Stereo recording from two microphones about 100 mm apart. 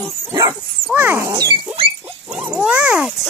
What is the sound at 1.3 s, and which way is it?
Rodents, 45° right (ahead or behind).